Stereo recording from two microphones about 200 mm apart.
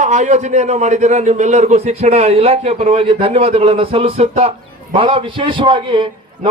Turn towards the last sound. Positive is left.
turn(degrees=-25)  # may be behind; listen again after turning